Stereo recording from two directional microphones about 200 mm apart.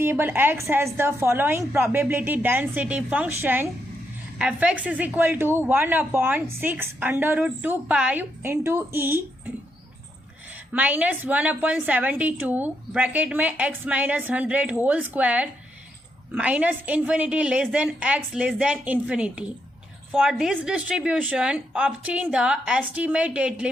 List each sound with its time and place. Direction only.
0.0 s speech: 10° right (ahead or behind)
10.7 s a woman's voice: 5° right (ahead or behind)